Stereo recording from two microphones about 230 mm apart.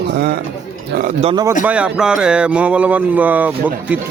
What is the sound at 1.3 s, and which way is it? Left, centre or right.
Speech, centre.